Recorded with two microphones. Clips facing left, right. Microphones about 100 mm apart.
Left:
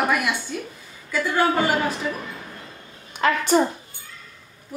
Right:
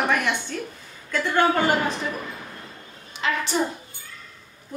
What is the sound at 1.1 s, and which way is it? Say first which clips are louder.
Speech: even; 5° left (ahead or behind).